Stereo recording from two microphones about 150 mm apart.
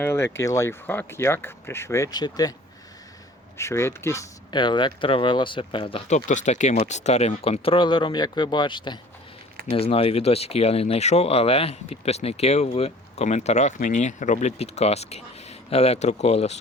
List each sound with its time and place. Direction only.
0.0 s speech: 15° left (ahead or behind)
3.6 s speech: 15° left (ahead or behind)
4.5 s speech: 30° left (ahead or behind)
6.1 s speech: 55° left (ahead or behind)